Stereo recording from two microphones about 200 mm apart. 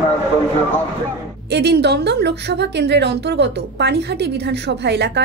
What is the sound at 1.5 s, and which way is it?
A woman's voice, 55° right (ahead or behind).